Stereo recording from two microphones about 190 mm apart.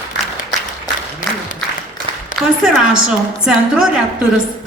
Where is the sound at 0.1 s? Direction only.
65° left (ahead or behind).